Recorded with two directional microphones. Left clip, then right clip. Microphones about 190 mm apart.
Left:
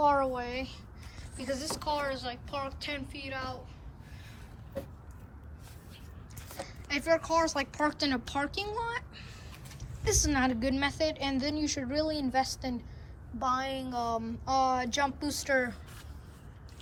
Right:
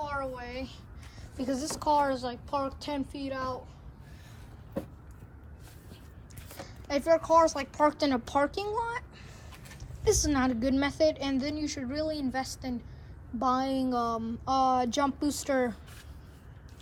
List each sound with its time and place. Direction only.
0.0 s a sound: 5° left (ahead or behind)
1.8 s a woman's voice: 25° right (ahead or behind)
6.8 s a woman's voice: 10° right (ahead or behind)
13.4 s a woman's voice: 20° right (ahead or behind)